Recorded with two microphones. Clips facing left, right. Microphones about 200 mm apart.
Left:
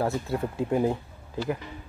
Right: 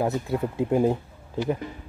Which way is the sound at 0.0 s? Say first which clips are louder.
Right 2 dB; 20° right (ahead or behind).